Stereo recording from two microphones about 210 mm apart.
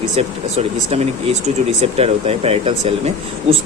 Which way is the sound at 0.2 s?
30° right (ahead or behind).